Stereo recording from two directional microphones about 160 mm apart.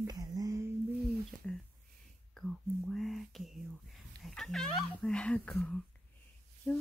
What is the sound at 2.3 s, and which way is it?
Speech, centre (ahead or behind).